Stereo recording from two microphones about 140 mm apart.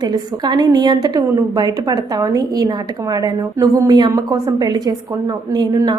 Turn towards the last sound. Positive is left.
turn(degrees=-30)  # may be behind; listen again after turning